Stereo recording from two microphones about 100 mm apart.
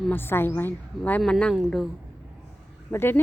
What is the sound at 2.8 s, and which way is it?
Speech, 20° left (ahead or behind).